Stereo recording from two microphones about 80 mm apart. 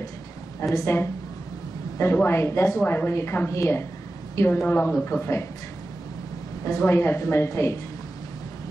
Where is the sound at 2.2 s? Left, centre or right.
Left.